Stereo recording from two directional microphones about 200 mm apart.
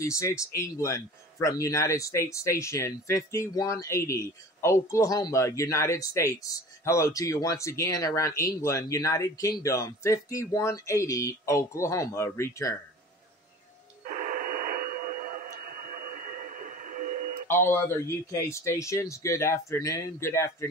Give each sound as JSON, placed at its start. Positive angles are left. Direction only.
{"t": 0.0, "sound": "speech", "side_deg": 15}
{"t": 14.0, "sound": "radio", "side_deg": -40}
{"t": 17.5, "sound": "speech", "side_deg": 10}